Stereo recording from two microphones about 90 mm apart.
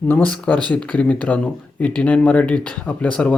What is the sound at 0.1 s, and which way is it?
Speech, 15° left (ahead or behind).